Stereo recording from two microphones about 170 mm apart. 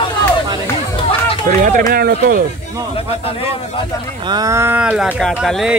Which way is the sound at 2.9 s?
35° left (ahead or behind).